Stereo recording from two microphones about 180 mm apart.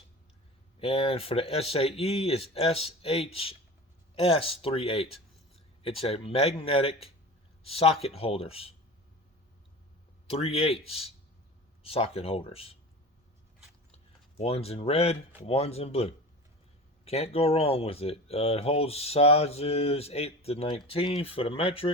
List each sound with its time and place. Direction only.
0.8 s speech: 35° left (ahead or behind)
10.2 s speech: 35° left (ahead or behind)
13.9 s speech: 35° left (ahead or behind)